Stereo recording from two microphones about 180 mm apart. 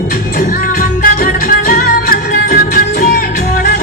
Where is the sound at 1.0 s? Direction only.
55° left (ahead or behind).